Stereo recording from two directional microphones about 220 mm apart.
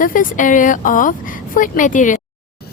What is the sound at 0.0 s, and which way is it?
A woman's voice, 40° left (ahead or behind).